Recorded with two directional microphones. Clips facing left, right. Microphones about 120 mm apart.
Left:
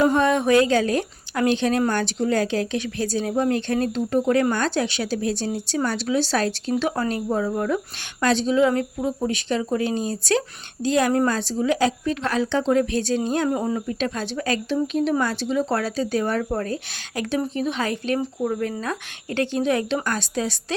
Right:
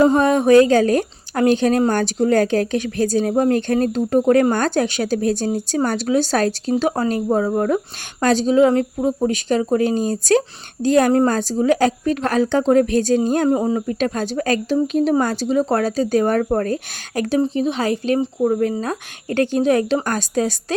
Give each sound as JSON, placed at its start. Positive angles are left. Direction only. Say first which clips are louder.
{"t": 0.0, "sound": "a woman's voice", "louder": "right 4 dB", "side_deg": -35}
{"t": 13.5, "sound": "speech", "louder": "right 6 dB", "side_deg": -25}
{"t": 13.7, "sound": "speech", "louder": "right 5 dB", "side_deg": -40}
{"t": 17.4, "sound": "a woman's voice", "louder": "right 5 dB", "side_deg": -30}